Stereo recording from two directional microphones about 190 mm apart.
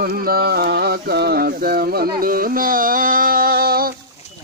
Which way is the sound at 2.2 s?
50° right (ahead or behind).